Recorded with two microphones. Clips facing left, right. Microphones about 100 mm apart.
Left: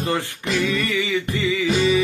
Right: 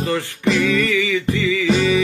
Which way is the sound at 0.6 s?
5° left (ahead or behind).